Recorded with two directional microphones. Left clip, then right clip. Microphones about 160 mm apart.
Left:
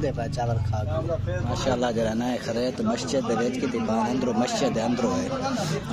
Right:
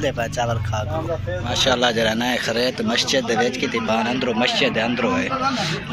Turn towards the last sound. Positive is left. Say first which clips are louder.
# right 6 dB
turn(degrees=20)  # may be behind; listen again after turning